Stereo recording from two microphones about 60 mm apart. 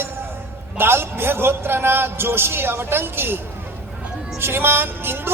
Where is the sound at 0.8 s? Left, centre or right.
Right.